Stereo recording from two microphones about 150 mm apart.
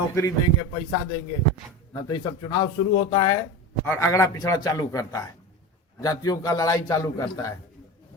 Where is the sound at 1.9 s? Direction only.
25° left (ahead or behind).